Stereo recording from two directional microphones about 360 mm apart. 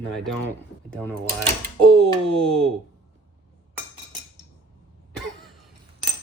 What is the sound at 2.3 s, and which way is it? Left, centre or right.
Speech, centre.